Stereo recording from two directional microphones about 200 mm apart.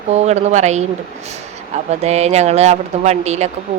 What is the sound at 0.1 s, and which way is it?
Speech, 35° right (ahead or behind).